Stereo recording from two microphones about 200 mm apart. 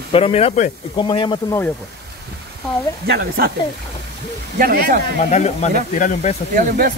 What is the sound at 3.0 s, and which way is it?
Speech, 50° right (ahead or behind).